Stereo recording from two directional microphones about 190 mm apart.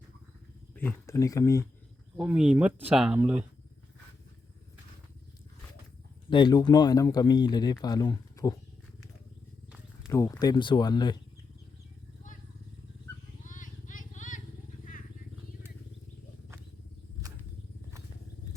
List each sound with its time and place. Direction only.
0.8 s speech: 15° left (ahead or behind)
2.1 s speech: 5° right (ahead or behind)
6.3 s speech: 20° left (ahead or behind)
10.1 s speech: 15° left (ahead or behind)
13.4 s vehicle: 40° left (ahead or behind)